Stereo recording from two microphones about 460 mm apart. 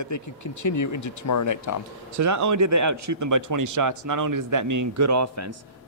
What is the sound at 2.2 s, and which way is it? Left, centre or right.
Speech, right.